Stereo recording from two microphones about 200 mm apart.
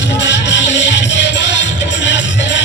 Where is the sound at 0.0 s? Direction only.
60° left (ahead or behind).